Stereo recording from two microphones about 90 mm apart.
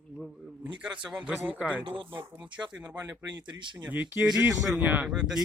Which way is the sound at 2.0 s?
60° right (ahead or behind).